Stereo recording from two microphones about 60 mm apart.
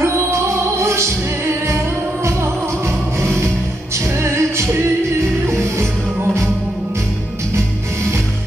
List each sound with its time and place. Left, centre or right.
0.0 s music: right
3.2 s music: right